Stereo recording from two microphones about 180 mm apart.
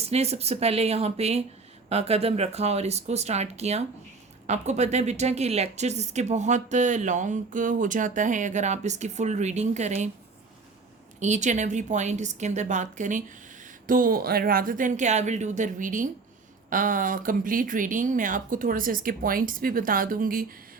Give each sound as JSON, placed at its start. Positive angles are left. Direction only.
{"t": 0.0, "sound": "speech", "side_deg": -35}
{"t": 11.2, "sound": "speech", "side_deg": -40}